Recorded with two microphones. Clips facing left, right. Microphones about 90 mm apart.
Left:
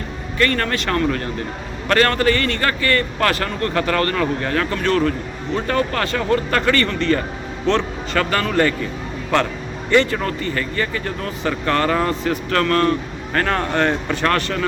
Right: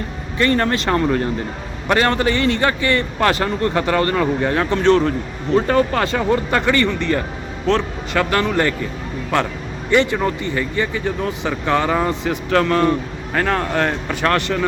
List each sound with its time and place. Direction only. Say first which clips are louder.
0.3 s a man's voice: right 3 dB; 20° right (ahead or behind)
9.9 s speech: right 1 dB; 15° right (ahead or behind)
13.3 s speech: right 1 dB; 5° right (ahead or behind)